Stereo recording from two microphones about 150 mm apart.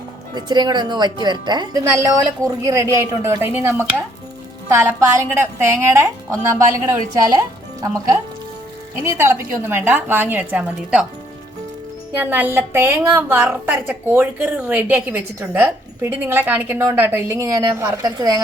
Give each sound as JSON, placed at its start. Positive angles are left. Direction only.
{"t": 0.3, "sound": "a woman's voice", "side_deg": -30}
{"t": 9.0, "sound": "a woman's voice", "side_deg": -15}
{"t": 12.1, "sound": "a woman's voice", "side_deg": -15}